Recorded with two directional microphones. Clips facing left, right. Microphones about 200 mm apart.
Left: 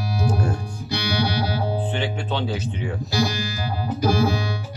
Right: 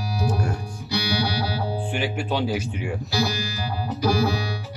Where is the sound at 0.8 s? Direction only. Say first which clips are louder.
Left 1 dB; 50° left (ahead or behind).